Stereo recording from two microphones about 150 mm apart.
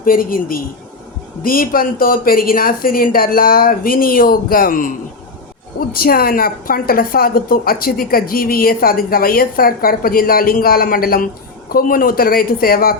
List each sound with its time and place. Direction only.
0.0 s a woman's voice: 70° left (ahead or behind)
5.9 s a woman's voice: 80° left